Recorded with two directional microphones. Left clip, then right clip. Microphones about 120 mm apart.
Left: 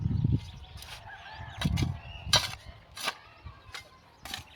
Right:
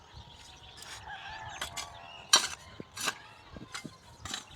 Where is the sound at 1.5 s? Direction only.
45° left (ahead or behind).